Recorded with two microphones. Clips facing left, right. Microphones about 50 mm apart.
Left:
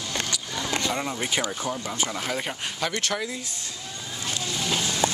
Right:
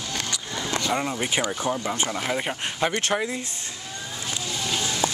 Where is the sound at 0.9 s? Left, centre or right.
Centre.